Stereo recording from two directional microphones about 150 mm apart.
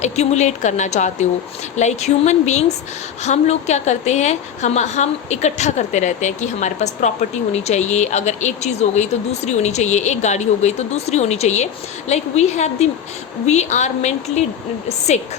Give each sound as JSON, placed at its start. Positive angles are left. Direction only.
{"t": 0.0, "sound": "a woman's voice", "side_deg": 50}